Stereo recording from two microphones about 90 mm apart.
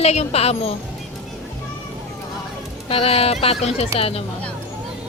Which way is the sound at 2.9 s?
90° left.